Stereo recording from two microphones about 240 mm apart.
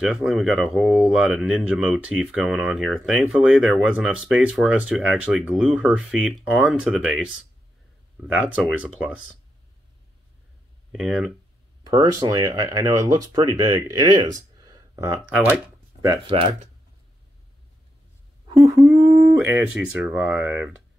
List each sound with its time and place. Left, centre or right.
0.0 s speech: centre
10.9 s speech: centre
11.8 s speech: centre
15.4 s a sound: centre
18.5 s a sound: centre
18.8 s speech: centre